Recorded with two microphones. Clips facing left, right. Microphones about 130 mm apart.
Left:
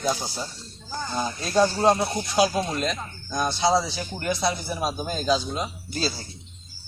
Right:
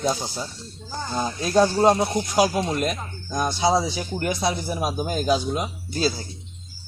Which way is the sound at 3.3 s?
10° right (ahead or behind).